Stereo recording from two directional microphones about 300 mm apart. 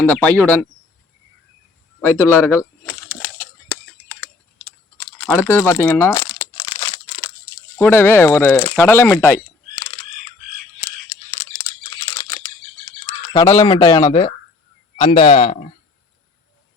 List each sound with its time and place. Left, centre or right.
0.0 s speech: centre
2.0 s speech: centre
4.9 s crumpling: centre
7.8 s speech: centre
13.1 s a man's voice: centre